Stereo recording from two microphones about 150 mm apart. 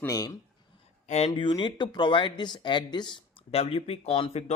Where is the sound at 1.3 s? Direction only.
30° left (ahead or behind).